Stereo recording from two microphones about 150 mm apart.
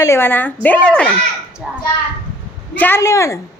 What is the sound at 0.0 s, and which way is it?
A woman's voice, 15° left (ahead or behind).